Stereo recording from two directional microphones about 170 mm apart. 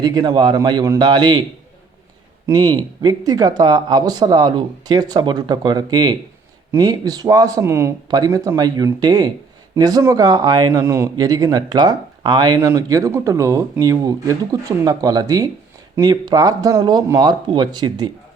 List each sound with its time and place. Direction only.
0.0 s speech: 25° right (ahead or behind)
2.5 s speech: 25° right (ahead or behind)